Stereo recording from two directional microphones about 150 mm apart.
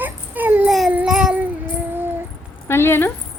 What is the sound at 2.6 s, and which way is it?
Zipper, 15° left (ahead or behind).